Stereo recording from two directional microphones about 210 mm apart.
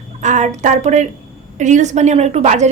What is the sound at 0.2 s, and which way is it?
A woman's voice, 35° right (ahead or behind).